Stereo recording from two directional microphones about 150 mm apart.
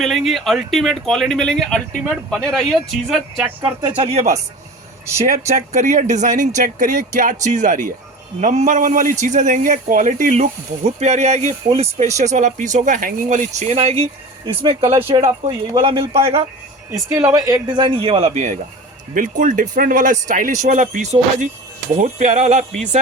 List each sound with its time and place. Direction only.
0.0 s speech: centre (ahead or behind)
3.6 s speech: 30° right (ahead or behind); by 13.9 s 45° right (ahead or behind)
14.4 s speech: 35° right (ahead or behind)
17.1 s speech: 15° right (ahead or behind); by 18.3 s 35° right (ahead or behind)
19.1 s speech: 60° right (ahead or behind)